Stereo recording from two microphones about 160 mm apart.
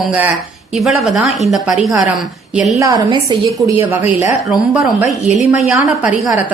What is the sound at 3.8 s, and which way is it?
Speech, 15° right (ahead or behind).